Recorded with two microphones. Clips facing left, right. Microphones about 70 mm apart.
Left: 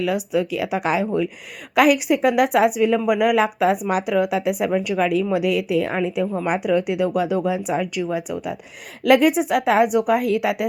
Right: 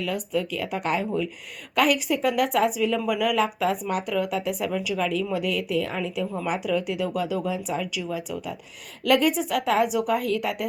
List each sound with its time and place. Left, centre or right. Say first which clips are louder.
0.0 s speech: left 6 dB; left
1.7 s a woman's voice: left 6 dB; left
4.7 s a woman's voice: left 6 dB; left
5.3 s a woman's voice: left 6 dB; left
7.7 s a woman's voice: left 6 dB; left